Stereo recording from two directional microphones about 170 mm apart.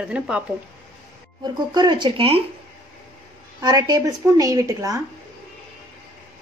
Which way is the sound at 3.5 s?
20° right (ahead or behind).